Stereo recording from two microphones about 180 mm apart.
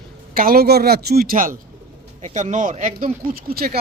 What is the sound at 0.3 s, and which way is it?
Speech, 55° right (ahead or behind).